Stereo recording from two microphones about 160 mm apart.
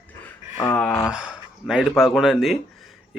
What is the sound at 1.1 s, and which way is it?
Speech, 5° right (ahead or behind).